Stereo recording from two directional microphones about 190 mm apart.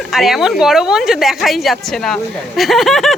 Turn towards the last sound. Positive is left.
turn(degrees=0)  # may be behind; listen again after turning